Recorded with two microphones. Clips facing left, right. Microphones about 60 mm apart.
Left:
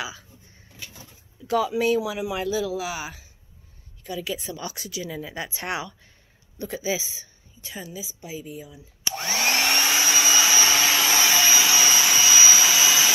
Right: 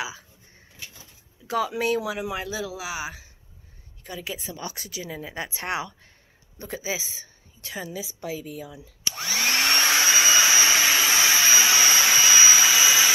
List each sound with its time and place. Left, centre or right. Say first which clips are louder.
1.8 s speech: left 2 dB; right
7.6 s a woman's voice: right 3 dB; right
9.0 s a sound: left 2 dB; left
9.7 s a sound: right 1 dB; right
10.1 s hair dryer: right 1 dB; right
10.7 s hair dryer: even; centre
11.1 s jet engine: even; right